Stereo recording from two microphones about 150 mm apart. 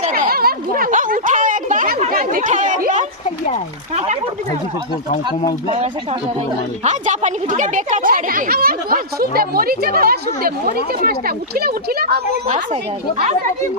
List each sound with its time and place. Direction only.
0.1 s a sound: 80° right; by 3.1 s 55° right (ahead or behind)
3.2 s a sound: 45° left (ahead or behind)
3.9 s a woman's voice: 45° right (ahead or behind)
5.6 s speech: 40° right (ahead or behind)
6.8 s speech: 55° right (ahead or behind); by 12.2 s 90° right
12.5 s a woman's voice: 50° right (ahead or behind)